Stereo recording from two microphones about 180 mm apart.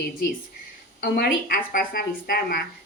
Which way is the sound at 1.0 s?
60° left (ahead or behind).